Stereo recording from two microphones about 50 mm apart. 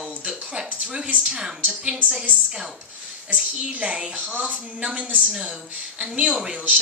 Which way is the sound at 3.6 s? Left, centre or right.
Right.